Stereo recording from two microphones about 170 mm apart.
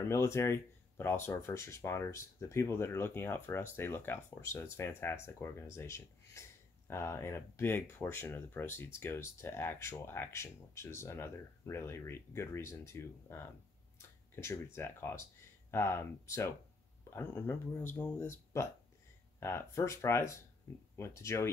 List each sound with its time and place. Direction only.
0.1 s speech: 15° left (ahead or behind)